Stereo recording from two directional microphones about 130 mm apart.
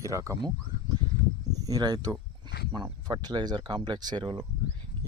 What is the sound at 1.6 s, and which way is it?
Speech, 30° right (ahead or behind).